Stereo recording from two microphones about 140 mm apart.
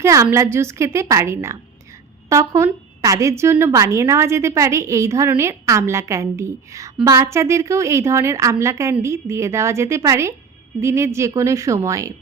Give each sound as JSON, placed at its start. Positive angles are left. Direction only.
{"t": 0.0, "sound": "a woman's voice", "side_deg": -20}